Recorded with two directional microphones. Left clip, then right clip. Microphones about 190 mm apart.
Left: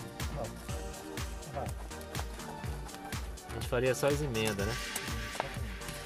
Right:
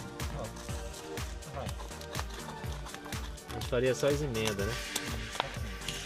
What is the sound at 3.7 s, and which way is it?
Speech, 5° left (ahead or behind).